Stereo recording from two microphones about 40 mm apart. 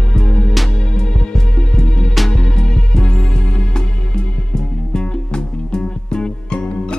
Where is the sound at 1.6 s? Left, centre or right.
Centre.